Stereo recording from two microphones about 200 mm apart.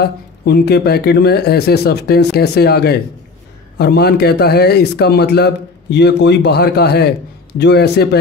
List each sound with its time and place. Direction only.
0.5 s a man's voice: 55° left (ahead or behind)